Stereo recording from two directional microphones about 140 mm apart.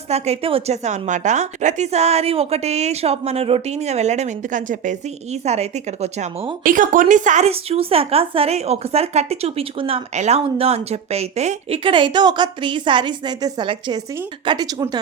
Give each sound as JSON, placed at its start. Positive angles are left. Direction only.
{"t": 0.1, "sound": "a woman's voice", "side_deg": -45}
{"t": 0.9, "sound": "a woman's voice", "side_deg": -60}
{"t": 6.7, "sound": "a woman's voice", "side_deg": -70}